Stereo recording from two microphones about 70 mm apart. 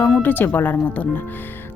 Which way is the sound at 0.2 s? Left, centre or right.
Left.